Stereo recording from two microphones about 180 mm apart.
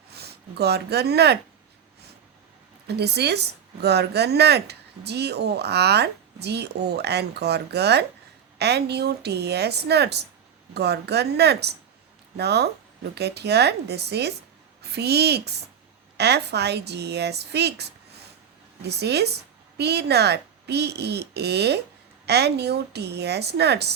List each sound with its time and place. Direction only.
0.1 s speech: 65° right (ahead or behind)
2.8 s a woman's voice: 65° right (ahead or behind)